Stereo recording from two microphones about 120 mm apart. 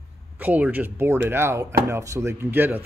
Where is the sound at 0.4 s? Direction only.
15° right (ahead or behind).